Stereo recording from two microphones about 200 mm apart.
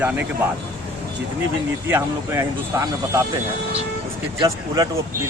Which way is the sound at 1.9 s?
10° right (ahead or behind).